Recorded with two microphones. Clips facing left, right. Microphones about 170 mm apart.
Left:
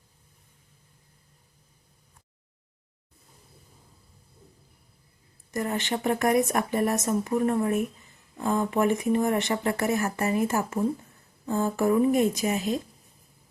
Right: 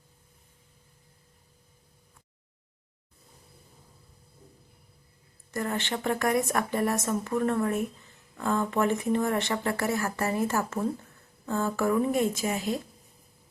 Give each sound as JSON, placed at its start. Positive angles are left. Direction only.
{"t": 5.5, "sound": "speech", "side_deg": 15}